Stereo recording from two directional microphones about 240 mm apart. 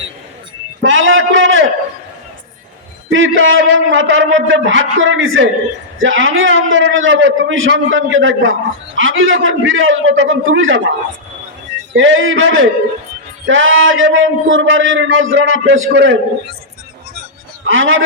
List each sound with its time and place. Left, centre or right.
0.8 s a sound: right
3.1 s a man's voice: right
11.9 s a man's voice: right
17.7 s speech: right